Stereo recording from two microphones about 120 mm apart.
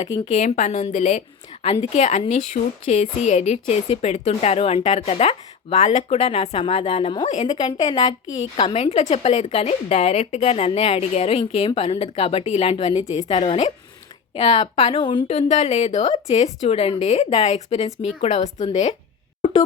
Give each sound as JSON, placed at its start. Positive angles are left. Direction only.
{"t": 0.3, "sound": "a woman's voice", "side_deg": 90}
{"t": 1.6, "sound": "a woman's voice", "side_deg": 60}
{"t": 7.3, "sound": "a woman's voice", "side_deg": 70}
{"t": 7.5, "sound": "a woman's voice", "side_deg": 35}
{"t": 8.7, "sound": "a woman's voice", "side_deg": 60}
{"t": 14.9, "sound": "a woman's voice", "side_deg": 40}
{"t": 15.3, "sound": "a woman's voice", "side_deg": 65}
{"t": 18.2, "sound": "a woman's voice", "side_deg": 70}